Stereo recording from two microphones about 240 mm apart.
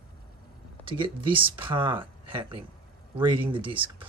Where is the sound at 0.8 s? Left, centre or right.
Right.